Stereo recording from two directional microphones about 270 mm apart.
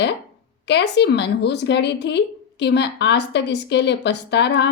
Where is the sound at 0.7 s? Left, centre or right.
Left.